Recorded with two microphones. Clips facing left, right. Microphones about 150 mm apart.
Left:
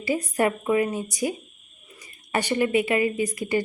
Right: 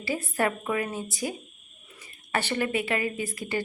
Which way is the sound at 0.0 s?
15° left (ahead or behind).